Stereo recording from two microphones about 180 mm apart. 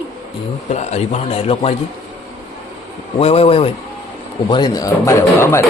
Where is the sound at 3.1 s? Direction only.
35° left (ahead or behind).